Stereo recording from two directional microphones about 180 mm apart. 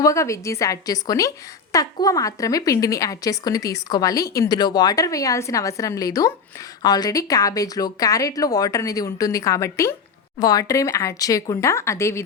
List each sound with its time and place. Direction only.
0.0 s a woman's voice: 15° left (ahead or behind)